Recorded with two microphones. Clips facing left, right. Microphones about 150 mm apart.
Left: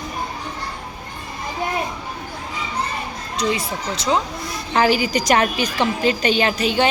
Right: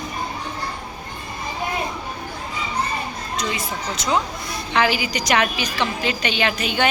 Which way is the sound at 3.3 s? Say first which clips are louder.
Left 5 dB; 30° left (ahead or behind).